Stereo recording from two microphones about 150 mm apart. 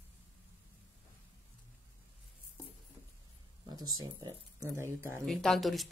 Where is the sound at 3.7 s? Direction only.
25° right (ahead or behind).